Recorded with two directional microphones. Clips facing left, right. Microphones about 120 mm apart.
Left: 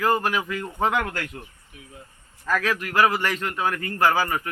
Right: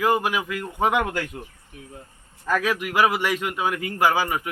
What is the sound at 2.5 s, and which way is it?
A man's voice, 15° right (ahead or behind).